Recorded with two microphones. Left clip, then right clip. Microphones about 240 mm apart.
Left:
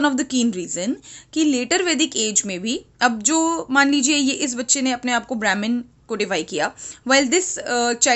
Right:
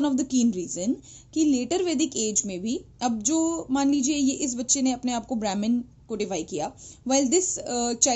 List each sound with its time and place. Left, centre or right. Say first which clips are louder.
0.0 s a woman's voice: left 5 dB; centre